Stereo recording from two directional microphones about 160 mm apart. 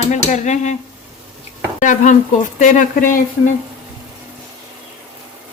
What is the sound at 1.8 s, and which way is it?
Speech, 50° left (ahead or behind).